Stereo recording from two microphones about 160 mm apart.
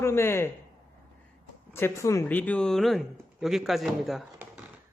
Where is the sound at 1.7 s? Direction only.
15° left (ahead or behind); by 4.2 s centre (ahead or behind).